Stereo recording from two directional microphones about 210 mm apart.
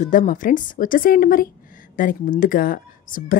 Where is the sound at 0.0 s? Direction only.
40° left (ahead or behind).